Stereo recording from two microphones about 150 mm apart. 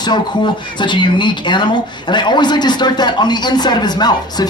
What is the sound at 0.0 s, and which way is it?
Speech, 30° left (ahead or behind).